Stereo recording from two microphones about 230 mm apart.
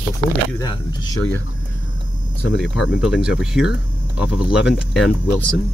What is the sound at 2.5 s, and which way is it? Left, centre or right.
Speech, centre.